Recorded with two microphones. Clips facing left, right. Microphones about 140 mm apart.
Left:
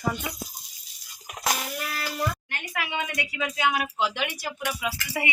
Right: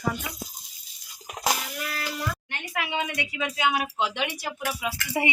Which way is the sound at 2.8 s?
20° right (ahead or behind).